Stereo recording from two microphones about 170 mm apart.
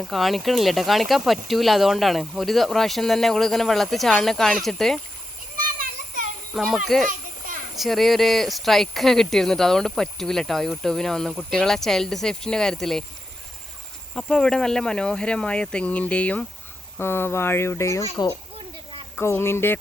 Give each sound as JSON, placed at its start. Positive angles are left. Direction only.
{"t": 0.1, "sound": "speech", "side_deg": 0}
{"t": 6.5, "sound": "a child's voice", "side_deg": 0}
{"t": 7.1, "sound": "children playing", "side_deg": -50}
{"t": 7.8, "sound": "speech", "side_deg": 0}
{"t": 14.2, "sound": "speech", "side_deg": 5}